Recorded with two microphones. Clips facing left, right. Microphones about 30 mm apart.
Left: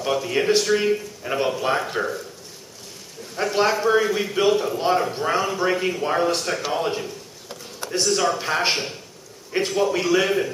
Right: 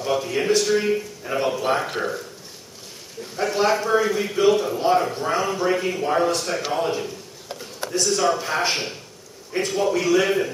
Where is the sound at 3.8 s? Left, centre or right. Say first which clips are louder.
Left 1 dB; centre.